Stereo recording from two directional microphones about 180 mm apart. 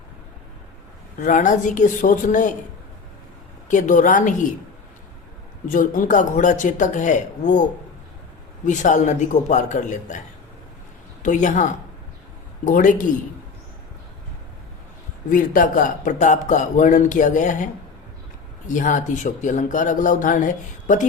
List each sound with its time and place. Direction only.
1.2 s speech: 45° left (ahead or behind)
3.7 s speech: 45° left (ahead or behind)
5.6 s speech: 45° left (ahead or behind)
8.6 s speech: 45° left (ahead or behind)
11.2 s speech: 45° left (ahead or behind)
15.3 s speech: 50° left (ahead or behind)